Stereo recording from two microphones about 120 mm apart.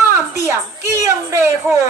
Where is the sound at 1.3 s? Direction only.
20° right (ahead or behind).